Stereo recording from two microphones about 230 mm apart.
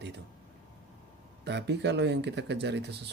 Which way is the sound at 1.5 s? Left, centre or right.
Right.